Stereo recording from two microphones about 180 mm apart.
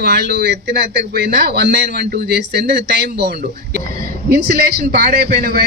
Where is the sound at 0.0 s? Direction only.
65° right (ahead or behind).